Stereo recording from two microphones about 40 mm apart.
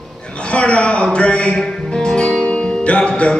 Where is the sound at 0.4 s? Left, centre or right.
Left.